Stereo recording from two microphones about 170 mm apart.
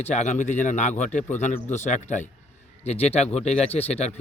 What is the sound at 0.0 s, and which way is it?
A man's voice, 40° left (ahead or behind).